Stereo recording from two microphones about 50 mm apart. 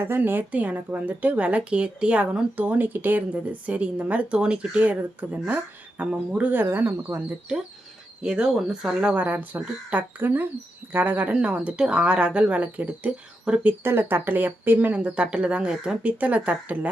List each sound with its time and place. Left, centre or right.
0.3 s speech: right
0.6 s a woman's voice: right
6.6 s speech: right
8.2 s speech: centre
9.1 s speech: right
11.3 s a woman's voice: right
13.5 s speech: centre
14.1 s speech: right
14.9 s a woman's voice: right
16.0 s speech: right